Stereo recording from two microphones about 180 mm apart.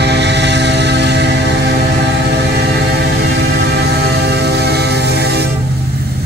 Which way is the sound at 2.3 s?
65° right (ahead or behind).